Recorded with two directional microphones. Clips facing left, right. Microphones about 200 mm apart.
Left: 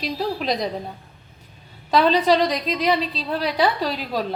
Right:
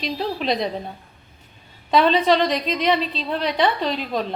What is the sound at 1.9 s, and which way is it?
A woman's voice, centre (ahead or behind).